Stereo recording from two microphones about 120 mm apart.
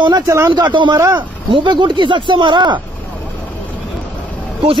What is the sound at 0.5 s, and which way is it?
Speech, 40° right (ahead or behind).